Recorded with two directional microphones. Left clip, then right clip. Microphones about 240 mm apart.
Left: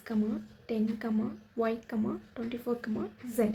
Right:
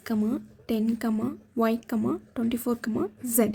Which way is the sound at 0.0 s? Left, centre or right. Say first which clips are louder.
Right 5 dB; right.